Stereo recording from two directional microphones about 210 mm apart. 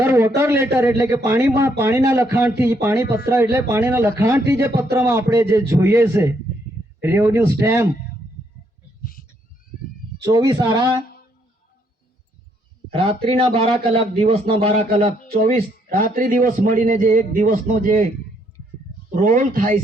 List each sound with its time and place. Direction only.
0.0 s speech: 10° right (ahead or behind)
10.2 s speech: 15° right (ahead or behind)
12.9 s a man's voice: 25° right (ahead or behind)
19.1 s a man's voice: 40° right (ahead or behind)